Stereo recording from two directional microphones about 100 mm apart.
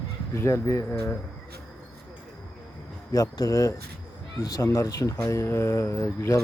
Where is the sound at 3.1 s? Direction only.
40° left (ahead or behind).